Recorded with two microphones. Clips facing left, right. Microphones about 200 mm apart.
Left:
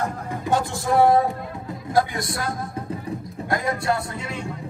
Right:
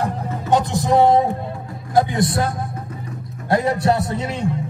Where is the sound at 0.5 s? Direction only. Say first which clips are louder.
Right 5 dB; 20° right (ahead or behind).